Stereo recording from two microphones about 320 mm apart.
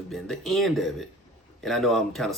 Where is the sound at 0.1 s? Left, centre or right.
Centre.